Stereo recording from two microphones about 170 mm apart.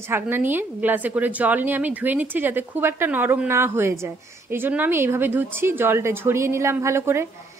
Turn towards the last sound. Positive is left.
turn(degrees=-15)  # may be behind; listen again after turning